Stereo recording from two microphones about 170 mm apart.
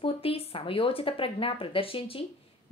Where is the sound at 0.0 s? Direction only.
35° left (ahead or behind).